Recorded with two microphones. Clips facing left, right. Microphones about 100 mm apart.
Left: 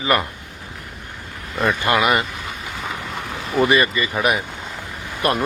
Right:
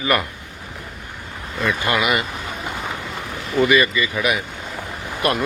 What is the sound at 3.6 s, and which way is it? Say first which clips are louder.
Speech: right 1 dB; 35° left (ahead or behind).